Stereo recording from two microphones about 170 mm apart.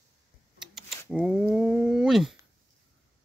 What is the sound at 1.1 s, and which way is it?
Dog, 5° right (ahead or behind).